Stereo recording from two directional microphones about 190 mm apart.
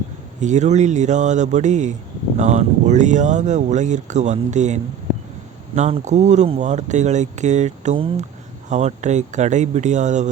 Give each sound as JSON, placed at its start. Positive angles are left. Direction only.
{"t": 0.3, "sound": "speech", "side_deg": -40}